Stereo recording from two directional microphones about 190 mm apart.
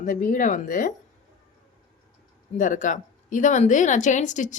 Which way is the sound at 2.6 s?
40° left (ahead or behind).